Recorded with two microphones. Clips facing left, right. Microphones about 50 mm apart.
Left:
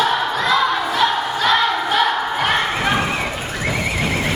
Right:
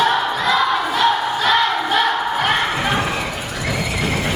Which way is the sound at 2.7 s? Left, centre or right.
Left.